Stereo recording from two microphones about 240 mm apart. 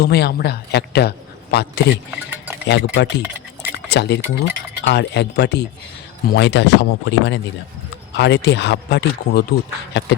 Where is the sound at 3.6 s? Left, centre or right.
Left.